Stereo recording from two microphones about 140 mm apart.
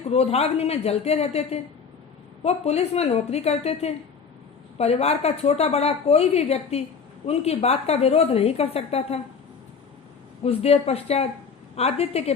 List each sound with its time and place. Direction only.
0.1 s a woman's voice: 50° left (ahead or behind)
10.4 s a woman's voice: 45° left (ahead or behind)